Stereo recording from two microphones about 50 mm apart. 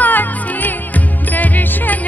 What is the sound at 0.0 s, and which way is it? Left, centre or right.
Music, left.